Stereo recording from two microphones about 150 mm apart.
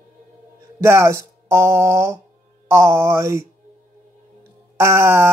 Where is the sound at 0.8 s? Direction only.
20° right (ahead or behind).